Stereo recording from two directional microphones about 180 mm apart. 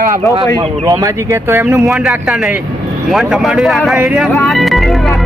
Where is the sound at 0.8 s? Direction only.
20° right (ahead or behind).